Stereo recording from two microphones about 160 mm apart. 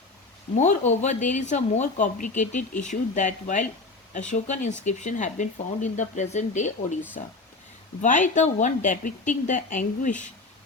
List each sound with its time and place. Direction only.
0.5 s speech: 50° left (ahead or behind)
8.4 s speech: 50° left (ahead or behind)